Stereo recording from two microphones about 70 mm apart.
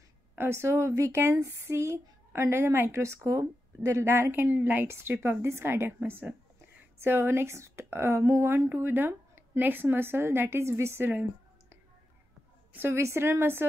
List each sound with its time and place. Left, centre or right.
0.4 s a woman's voice: right
12.7 s a woman's voice: right